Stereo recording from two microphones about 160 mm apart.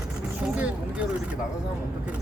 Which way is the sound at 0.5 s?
5° right (ahead or behind).